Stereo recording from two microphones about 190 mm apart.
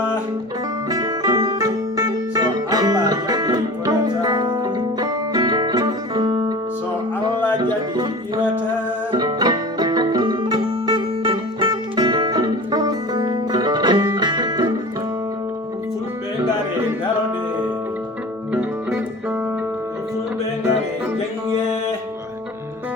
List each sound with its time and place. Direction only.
0.9 s music: 20° right (ahead or behind)
7.6 s music: 25° right (ahead or behind)